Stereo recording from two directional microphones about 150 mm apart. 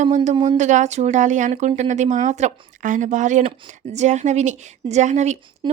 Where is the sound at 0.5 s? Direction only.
50° right (ahead or behind).